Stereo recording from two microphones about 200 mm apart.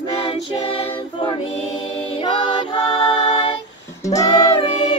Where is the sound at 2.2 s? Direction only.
25° left (ahead or behind).